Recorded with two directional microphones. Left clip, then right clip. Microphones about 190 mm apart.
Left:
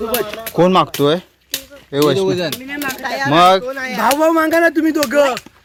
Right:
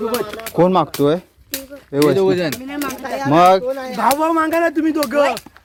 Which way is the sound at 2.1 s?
70° right (ahead or behind).